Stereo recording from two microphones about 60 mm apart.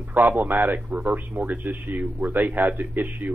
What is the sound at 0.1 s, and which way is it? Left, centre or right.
A man's voice, right.